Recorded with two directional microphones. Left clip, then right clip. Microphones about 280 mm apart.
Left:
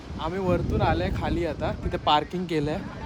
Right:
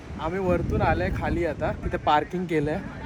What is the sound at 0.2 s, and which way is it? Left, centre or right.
Speech, centre.